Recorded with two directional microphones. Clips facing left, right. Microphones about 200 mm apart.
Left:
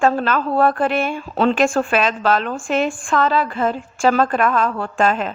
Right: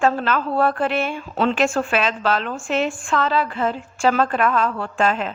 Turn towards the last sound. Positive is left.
turn(degrees=45)  # may be behind; listen again after turning